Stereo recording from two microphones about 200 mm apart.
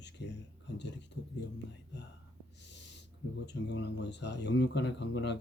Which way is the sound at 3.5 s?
55° left (ahead or behind).